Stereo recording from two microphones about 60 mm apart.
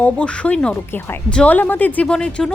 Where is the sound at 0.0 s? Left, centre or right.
Left.